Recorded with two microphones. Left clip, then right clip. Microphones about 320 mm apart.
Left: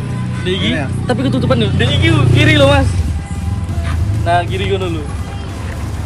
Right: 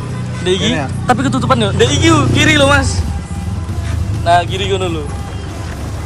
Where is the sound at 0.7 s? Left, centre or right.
Right.